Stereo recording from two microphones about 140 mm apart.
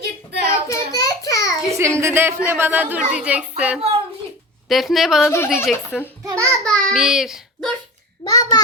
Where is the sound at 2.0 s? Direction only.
20° right (ahead or behind).